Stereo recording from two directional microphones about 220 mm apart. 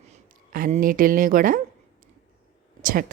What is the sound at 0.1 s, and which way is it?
Speech, 35° right (ahead or behind).